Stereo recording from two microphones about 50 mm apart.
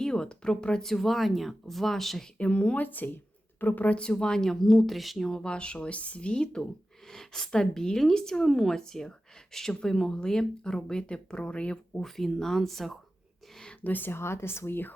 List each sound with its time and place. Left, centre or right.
0.0 s speech: centre
2.4 s speech: left
2.8 s speech: left
12.0 s speech: centre
13.8 s speech: left
14.1 s speech: left